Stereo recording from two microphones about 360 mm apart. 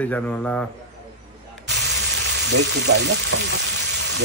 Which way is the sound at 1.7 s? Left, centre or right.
Right.